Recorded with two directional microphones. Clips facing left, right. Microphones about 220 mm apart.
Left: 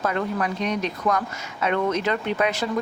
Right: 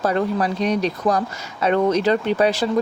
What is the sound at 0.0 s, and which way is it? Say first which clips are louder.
A woman's voice: right 5 dB; 35° right (ahead or behind).